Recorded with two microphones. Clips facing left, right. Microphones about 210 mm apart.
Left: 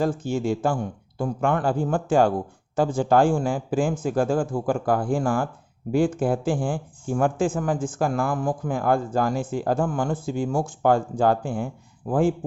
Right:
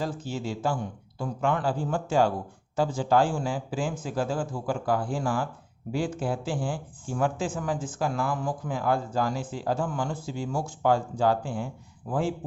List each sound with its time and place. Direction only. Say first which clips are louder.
0.0 s speech: left 8 dB; 50° left (ahead or behind)